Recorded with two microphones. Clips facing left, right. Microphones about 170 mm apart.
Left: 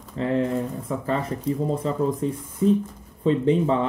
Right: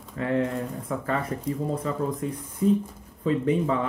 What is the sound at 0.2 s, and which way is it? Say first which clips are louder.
Speech: left 3 dB; 25° left (ahead or behind).